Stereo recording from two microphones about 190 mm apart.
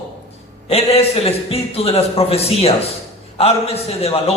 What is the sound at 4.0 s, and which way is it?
Speech, 30° left (ahead or behind).